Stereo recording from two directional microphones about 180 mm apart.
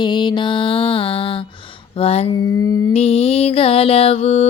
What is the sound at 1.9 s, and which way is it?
Mantra, 35° left (ahead or behind).